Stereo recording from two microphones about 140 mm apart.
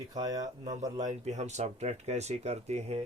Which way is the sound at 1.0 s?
55° right (ahead or behind).